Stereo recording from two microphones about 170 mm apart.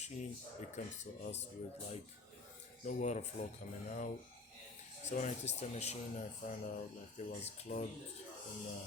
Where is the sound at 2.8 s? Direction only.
45° left (ahead or behind).